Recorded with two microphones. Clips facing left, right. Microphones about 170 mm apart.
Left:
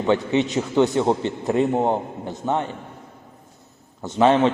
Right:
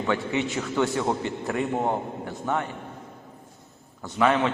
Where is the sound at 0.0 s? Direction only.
25° left (ahead or behind).